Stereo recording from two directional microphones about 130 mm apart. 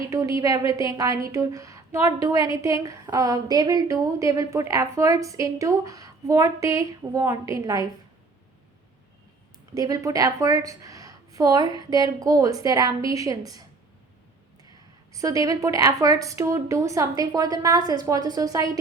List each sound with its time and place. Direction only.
0.1 s a woman's voice: 25° right (ahead or behind)
9.7 s a woman's voice: 30° right (ahead or behind)
15.1 s a woman's voice: 25° right (ahead or behind)